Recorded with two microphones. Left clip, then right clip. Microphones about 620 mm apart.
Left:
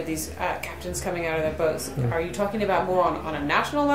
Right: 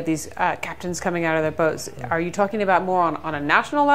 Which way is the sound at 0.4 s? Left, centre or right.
Right.